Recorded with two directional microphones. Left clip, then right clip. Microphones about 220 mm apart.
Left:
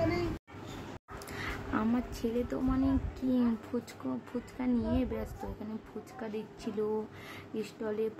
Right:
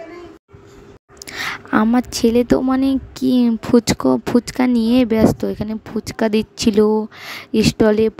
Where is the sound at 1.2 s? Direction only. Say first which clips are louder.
Right 15 dB; 45° right (ahead or behind).